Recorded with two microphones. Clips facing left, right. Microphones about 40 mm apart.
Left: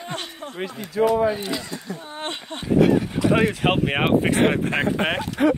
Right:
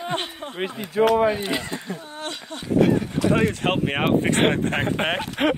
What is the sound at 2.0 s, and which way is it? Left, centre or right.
Speech, left.